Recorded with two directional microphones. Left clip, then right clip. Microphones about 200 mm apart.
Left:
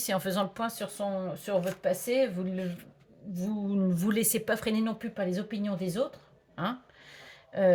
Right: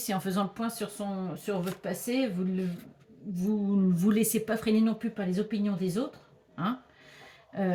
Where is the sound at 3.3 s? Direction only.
50° left (ahead or behind).